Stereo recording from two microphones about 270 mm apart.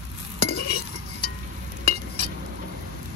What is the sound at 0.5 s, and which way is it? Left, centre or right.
Stir, left.